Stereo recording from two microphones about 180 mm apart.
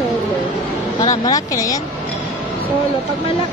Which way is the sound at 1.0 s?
20° left (ahead or behind).